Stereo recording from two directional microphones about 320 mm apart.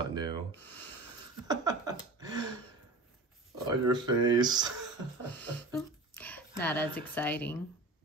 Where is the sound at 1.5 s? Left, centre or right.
Centre.